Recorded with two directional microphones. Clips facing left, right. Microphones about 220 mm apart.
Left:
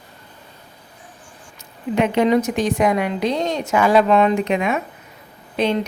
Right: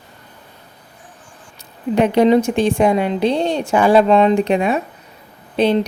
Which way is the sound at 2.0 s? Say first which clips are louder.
Right 4 dB; 35° right (ahead or behind).